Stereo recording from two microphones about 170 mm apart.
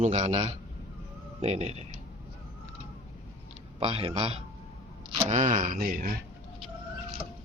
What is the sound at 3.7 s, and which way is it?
Speech, 30° right (ahead or behind).